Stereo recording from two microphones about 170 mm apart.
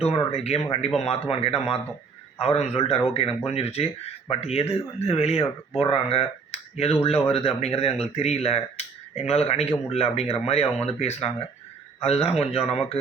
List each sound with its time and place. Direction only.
0.0 s a man's voice: 35° left (ahead or behind)